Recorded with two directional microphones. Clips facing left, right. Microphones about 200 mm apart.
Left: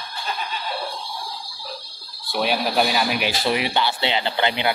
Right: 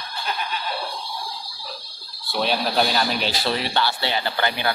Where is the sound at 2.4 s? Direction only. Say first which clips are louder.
Left 1 dB; 10° left (ahead or behind).